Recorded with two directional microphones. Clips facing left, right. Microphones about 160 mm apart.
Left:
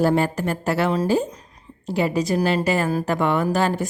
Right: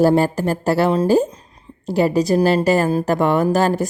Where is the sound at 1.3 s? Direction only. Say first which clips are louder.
Right 1 dB; 30° right (ahead or behind).